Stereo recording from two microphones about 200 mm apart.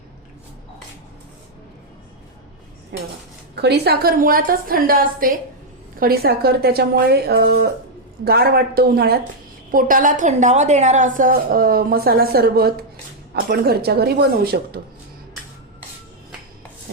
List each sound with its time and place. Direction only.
2.9 s dishes: 55° right (ahead or behind)
3.5 s a woman's voice: 55° right (ahead or behind)